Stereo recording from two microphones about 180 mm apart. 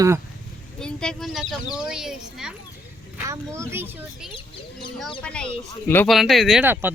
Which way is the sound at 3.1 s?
15° right (ahead or behind).